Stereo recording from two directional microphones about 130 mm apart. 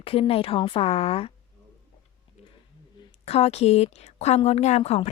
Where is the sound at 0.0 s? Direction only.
45° left (ahead or behind).